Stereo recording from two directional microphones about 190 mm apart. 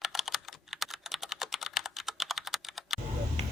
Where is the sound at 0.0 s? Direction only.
Centre (ahead or behind).